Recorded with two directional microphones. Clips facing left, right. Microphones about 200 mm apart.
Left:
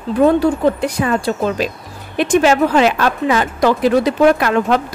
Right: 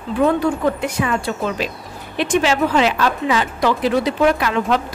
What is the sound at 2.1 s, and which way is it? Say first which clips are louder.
Speech: left 5 dB; 50° left (ahead or behind).